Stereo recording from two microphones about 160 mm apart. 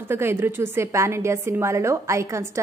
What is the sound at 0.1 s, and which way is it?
A woman's voice, 15° right (ahead or behind).